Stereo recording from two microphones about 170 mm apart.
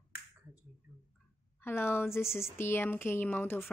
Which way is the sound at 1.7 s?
15° left (ahead or behind).